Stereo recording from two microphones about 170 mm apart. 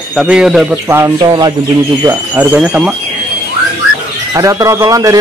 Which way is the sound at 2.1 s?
10° right (ahead or behind).